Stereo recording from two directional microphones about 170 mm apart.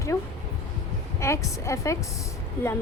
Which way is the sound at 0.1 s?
20° left (ahead or behind).